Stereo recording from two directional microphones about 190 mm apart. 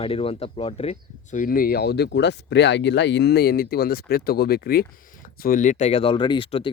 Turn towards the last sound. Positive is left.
turn(degrees=25)  # may be behind; listen again after turning